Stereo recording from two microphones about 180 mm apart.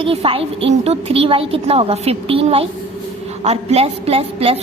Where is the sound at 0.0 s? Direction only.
30° right (ahead or behind).